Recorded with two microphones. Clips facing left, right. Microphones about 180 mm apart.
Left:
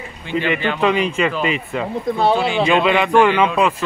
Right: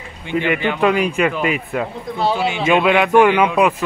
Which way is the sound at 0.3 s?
15° right (ahead or behind).